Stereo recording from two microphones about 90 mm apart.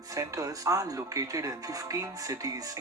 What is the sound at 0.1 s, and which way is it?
Speech, 40° right (ahead or behind).